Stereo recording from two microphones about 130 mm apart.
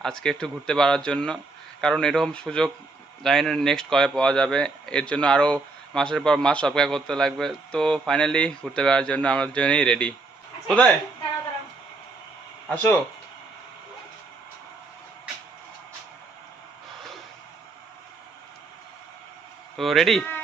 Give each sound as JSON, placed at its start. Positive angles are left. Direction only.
{"t": 0.0, "sound": "a man's voice", "side_deg": 5}
{"t": 12.7, "sound": "a man's voice", "side_deg": 15}
{"t": 19.7, "sound": "a man's voice", "side_deg": 0}